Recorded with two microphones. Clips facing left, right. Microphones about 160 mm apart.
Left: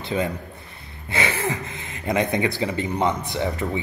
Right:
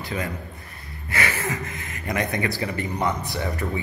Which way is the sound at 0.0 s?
25° left (ahead or behind).